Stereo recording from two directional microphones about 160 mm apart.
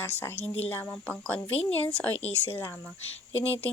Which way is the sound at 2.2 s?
40° left (ahead or behind).